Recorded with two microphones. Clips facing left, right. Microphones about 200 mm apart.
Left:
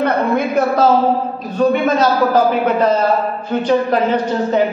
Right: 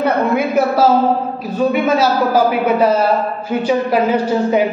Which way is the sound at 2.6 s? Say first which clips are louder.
Right 1 dB; 10° right (ahead or behind).